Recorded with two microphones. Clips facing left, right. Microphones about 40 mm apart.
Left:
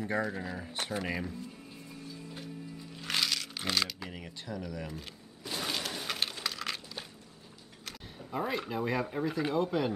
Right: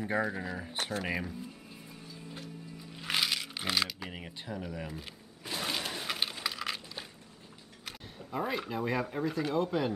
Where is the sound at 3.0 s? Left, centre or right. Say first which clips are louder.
Right 1 dB; centre.